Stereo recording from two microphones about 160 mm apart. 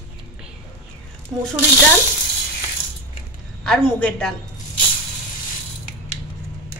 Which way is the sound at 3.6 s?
5° left (ahead or behind).